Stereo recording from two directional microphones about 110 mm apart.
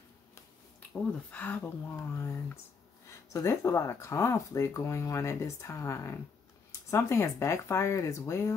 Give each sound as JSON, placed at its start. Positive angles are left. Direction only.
{"t": 1.3, "sound": "speech", "side_deg": 15}